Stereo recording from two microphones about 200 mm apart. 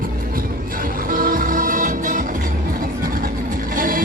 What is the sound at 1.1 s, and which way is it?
Music, 45° right (ahead or behind).